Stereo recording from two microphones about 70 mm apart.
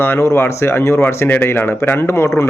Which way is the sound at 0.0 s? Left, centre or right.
Left.